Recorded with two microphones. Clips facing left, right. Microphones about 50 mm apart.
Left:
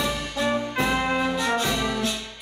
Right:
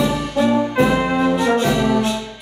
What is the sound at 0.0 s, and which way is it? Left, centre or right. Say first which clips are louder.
Brass instrument: right 8 dB; centre.